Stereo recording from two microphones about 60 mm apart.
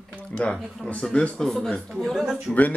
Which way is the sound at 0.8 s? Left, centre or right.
Centre.